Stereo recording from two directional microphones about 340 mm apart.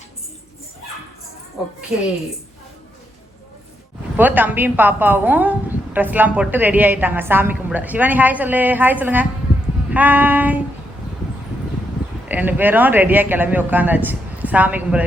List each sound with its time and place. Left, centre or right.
4.2 s a woman's voice: centre
12.3 s a woman's voice: centre